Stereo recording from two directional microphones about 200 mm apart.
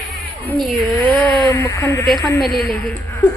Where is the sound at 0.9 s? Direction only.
10° left (ahead or behind).